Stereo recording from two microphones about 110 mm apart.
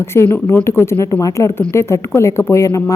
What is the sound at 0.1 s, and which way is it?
Speech, 25° left (ahead or behind).